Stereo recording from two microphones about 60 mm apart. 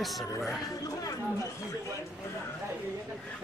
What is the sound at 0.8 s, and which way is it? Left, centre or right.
Chatter, left.